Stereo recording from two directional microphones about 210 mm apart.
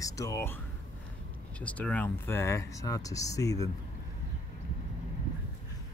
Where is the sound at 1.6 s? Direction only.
5° left (ahead or behind).